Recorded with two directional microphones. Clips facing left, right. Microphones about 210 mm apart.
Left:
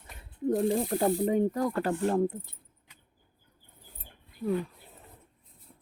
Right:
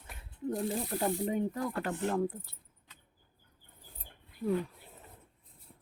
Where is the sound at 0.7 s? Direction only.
45° left (ahead or behind).